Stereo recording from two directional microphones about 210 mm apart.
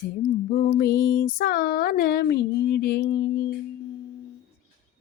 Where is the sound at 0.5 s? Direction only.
50° left (ahead or behind).